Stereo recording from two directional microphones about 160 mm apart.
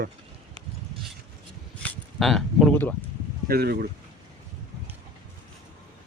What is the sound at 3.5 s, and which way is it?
Speech, 75° right (ahead or behind).